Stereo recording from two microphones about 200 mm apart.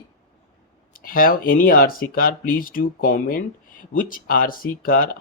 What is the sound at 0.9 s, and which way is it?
Speech, 45° left (ahead or behind).